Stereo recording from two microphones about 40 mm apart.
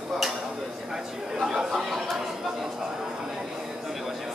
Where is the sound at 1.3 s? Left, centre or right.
Centre.